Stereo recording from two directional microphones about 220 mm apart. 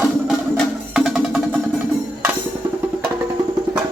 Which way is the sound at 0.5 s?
Centre (ahead or behind).